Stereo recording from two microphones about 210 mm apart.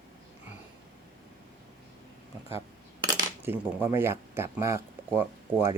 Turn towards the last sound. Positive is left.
turn(degrees=-10)  # may be behind; listen again after turning